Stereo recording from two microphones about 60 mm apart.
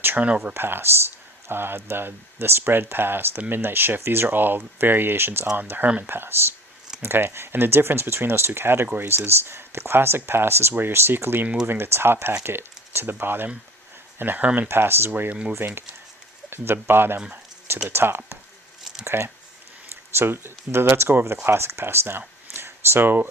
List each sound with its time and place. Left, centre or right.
0.2 s speech: right
0.5 s speech: right
14.7 s speech: right
15.3 s speech: centre
15.5 s speech: right
22.5 s a sound: right